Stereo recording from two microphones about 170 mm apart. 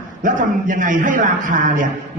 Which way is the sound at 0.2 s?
50° right (ahead or behind).